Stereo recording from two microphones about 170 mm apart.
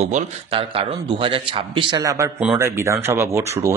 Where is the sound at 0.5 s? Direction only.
30° right (ahead or behind).